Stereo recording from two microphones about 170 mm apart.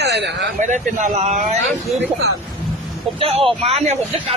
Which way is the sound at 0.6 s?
50° right (ahead or behind).